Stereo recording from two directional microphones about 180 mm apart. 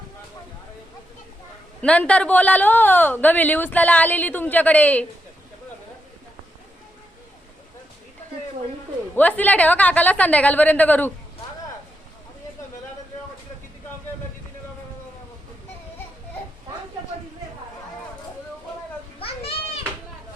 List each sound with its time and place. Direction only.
1.8 s speech: 5° left (ahead or behind)
9.1 s speech: 10° left (ahead or behind)
19.2 s children playing: 35° left (ahead or behind)